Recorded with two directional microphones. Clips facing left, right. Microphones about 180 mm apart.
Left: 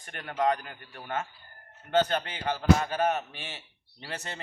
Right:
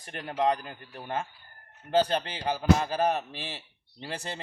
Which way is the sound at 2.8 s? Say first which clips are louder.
Right 1 dB; 35° right (ahead or behind).